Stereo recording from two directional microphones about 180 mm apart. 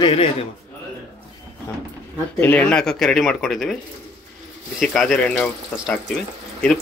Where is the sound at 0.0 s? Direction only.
30° left (ahead or behind).